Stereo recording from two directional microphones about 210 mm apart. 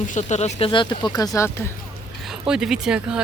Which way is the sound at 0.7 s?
20° left (ahead or behind).